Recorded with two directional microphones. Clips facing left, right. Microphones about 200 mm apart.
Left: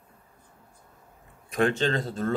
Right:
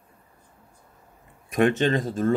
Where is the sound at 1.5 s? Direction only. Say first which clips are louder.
Right 4 dB; 20° right (ahead or behind).